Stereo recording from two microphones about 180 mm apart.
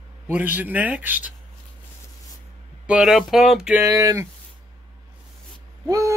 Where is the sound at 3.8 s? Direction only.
20° right (ahead or behind).